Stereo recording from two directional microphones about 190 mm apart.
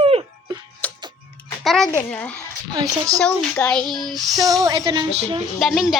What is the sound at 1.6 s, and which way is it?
Speech, centre (ahead or behind).